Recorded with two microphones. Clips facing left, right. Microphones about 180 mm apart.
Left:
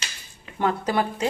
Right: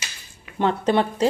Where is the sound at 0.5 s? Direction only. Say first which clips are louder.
Right 3 dB; 25° right (ahead or behind).